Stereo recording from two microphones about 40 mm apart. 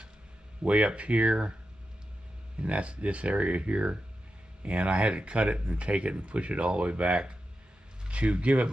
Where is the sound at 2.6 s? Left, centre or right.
Right.